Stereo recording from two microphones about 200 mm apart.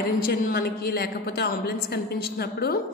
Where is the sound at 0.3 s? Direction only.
50° left (ahead or behind).